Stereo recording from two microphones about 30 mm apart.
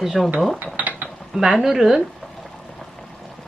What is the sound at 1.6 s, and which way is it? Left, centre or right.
Speech, centre.